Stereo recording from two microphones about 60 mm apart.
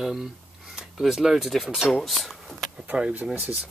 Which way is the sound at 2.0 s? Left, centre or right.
Centre.